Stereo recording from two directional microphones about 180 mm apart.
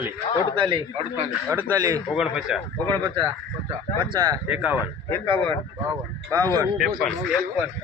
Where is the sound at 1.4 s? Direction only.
15° right (ahead or behind).